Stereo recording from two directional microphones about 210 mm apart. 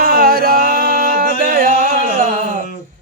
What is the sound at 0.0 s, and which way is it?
Singing, 45° right (ahead or behind).